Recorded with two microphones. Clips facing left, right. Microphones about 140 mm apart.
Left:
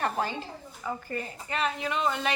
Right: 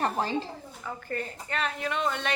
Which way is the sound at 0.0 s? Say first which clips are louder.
Right 1 dB; 30° right (ahead or behind).